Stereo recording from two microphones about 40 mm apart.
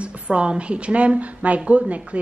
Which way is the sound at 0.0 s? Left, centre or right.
Right.